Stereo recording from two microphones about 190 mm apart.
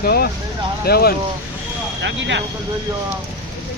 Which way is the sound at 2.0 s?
70° right (ahead or behind).